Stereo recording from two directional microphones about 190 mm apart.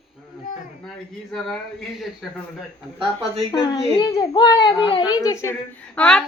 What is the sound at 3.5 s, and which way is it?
A child's voice, 20° left (ahead or behind).